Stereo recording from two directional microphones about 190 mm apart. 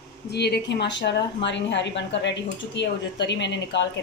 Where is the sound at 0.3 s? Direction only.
60° left (ahead or behind).